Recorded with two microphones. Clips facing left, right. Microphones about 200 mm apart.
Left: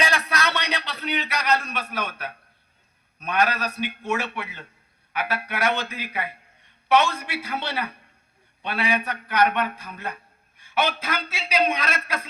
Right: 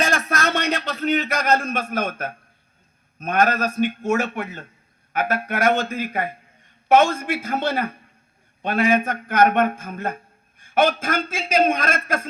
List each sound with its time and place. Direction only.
0.0 s a man's voice: 45° right (ahead or behind)